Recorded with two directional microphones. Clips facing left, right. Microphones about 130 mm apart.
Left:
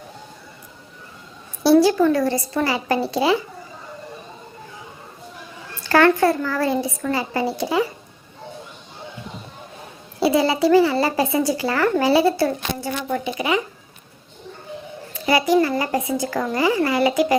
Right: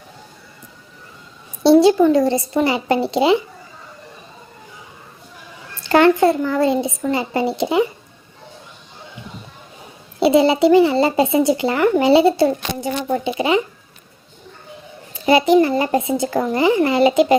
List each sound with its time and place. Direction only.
1.6 s speech: 25° right (ahead or behind)
5.8 s speech: 20° right (ahead or behind)
10.2 s speech: 25° right (ahead or behind)
15.3 s speech: 25° right (ahead or behind)